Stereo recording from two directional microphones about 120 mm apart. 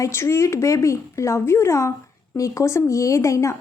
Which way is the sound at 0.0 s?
20° left (ahead or behind).